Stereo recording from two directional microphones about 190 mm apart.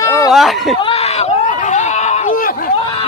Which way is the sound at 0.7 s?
30° left (ahead or behind).